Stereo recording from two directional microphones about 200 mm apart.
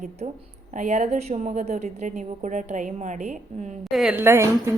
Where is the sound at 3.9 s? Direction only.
5° right (ahead or behind).